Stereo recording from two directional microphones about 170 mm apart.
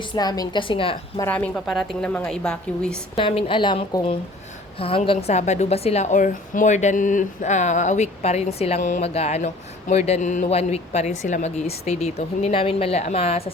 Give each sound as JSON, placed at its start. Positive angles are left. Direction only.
{"t": 0.1, "sound": "a woman's voice", "side_deg": 25}
{"t": 1.2, "sound": "a woman's voice", "side_deg": 10}
{"t": 3.2, "sound": "a woman's voice", "side_deg": 30}